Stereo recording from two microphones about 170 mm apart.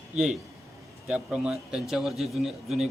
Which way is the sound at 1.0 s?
5° right (ahead or behind).